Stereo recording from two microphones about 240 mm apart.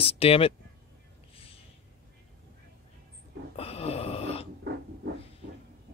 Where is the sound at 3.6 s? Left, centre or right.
Left.